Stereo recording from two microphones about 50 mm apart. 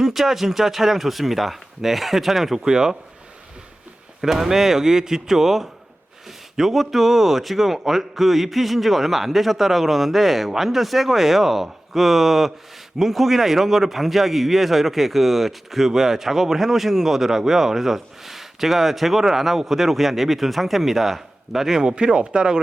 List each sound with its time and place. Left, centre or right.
0.0 s a man's voice: centre
4.2 s a man's voice: centre